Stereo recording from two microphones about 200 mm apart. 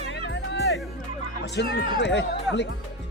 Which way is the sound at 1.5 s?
60° left (ahead or behind).